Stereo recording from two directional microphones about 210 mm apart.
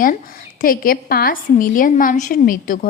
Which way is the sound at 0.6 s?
45° left (ahead or behind).